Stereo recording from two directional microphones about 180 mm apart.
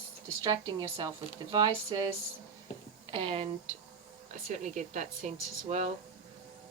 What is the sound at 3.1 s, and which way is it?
Speech, 30° right (ahead or behind).